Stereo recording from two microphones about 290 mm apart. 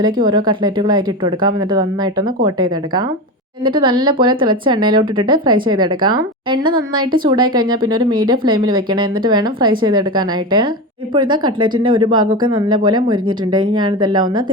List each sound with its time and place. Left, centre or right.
0.0 s speech: centre